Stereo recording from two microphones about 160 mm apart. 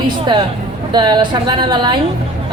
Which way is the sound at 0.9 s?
30° right (ahead or behind).